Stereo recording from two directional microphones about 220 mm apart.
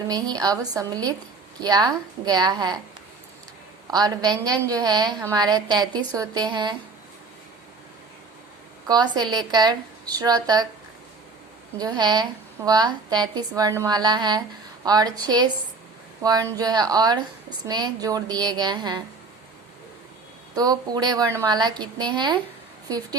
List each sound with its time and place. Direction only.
0.1 s a woman's voice: 15° right (ahead or behind)
3.9 s a woman's voice: 15° right (ahead or behind)
8.9 s a woman's voice: 20° right (ahead or behind)
11.8 s a woman's voice: 20° right (ahead or behind)
20.6 s a woman's voice: 15° right (ahead or behind)